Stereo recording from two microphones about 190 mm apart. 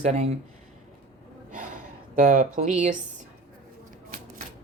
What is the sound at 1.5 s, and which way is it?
Gasp, 45° right (ahead or behind).